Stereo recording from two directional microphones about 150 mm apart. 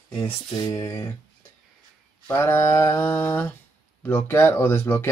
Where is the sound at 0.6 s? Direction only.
25° left (ahead or behind).